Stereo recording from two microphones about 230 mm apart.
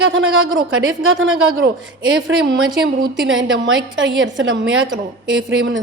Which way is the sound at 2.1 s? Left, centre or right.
Right.